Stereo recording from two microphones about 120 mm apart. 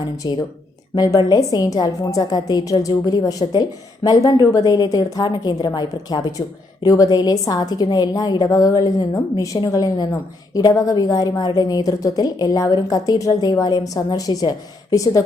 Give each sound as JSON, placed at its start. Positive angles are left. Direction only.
{"t": 0.2, "sound": "a woman's voice", "side_deg": 40}